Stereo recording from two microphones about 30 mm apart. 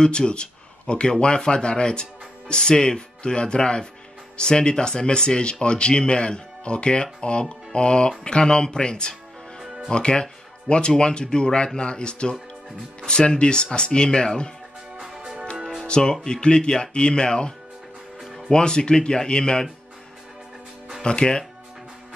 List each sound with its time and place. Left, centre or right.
0.0 s speech: left
1.1 s speech: left
15.0 s music: centre
15.8 s speech: left
21.0 s speech: left